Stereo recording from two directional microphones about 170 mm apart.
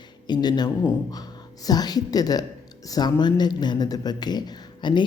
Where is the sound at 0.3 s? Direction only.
25° left (ahead or behind).